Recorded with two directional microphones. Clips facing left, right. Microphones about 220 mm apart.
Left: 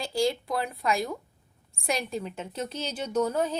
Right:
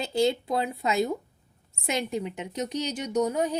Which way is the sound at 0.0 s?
25° right (ahead or behind).